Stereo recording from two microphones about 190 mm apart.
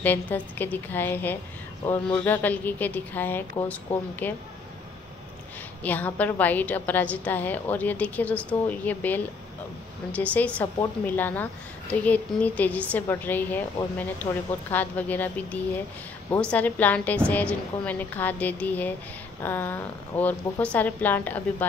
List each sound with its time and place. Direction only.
0.0 s a woman's voice: 10° left (ahead or behind)
5.8 s a woman's voice: 10° left (ahead or behind)